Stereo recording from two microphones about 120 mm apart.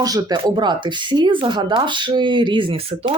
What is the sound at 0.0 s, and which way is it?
Speech, 35° right (ahead or behind).